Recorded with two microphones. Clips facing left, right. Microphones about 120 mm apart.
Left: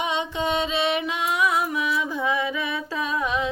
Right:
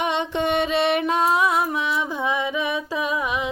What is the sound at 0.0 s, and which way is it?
Music, 60° right (ahead or behind).